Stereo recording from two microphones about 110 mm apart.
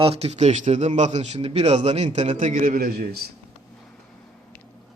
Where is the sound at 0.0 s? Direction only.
65° right (ahead or behind); by 1.5 s 90° right.